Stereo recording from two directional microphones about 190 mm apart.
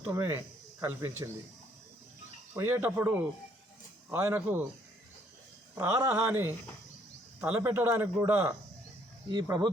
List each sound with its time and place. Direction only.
0.0 s speech: 15° right (ahead or behind)
2.6 s speech: 15° right (ahead or behind)
5.7 s speech: 15° right (ahead or behind)